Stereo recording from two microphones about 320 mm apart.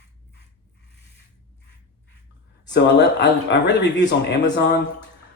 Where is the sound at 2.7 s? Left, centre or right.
Left.